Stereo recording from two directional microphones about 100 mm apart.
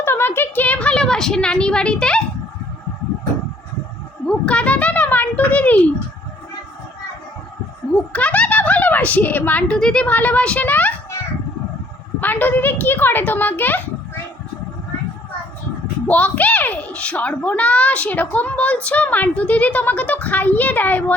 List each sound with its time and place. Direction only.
0.0 s a woman's voice: 25° left (ahead or behind)
4.3 s speech: 10° left (ahead or behind)
8.1 s a child's voice: 15° left (ahead or behind)
12.2 s a child's voice: 20° left (ahead or behind)
16.0 s a child's voice: 15° left (ahead or behind)